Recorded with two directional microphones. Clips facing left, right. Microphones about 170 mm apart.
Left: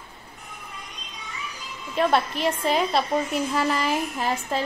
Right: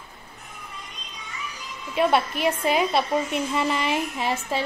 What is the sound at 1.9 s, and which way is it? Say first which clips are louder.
A woman's voice: right 1 dB; 5° right (ahead or behind).